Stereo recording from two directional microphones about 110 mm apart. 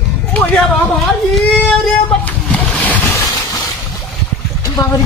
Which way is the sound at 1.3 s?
10° left (ahead or behind).